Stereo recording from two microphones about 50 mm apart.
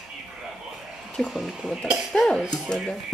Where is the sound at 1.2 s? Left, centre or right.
Centre.